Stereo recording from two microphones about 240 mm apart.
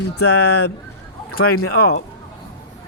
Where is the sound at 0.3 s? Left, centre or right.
Left.